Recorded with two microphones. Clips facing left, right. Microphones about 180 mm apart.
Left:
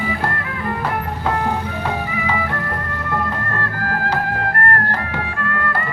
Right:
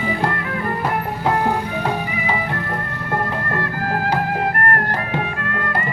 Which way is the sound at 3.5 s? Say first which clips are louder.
Right 2 dB; 15° right (ahead or behind).